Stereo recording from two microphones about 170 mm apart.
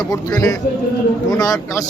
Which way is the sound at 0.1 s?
20° left (ahead or behind).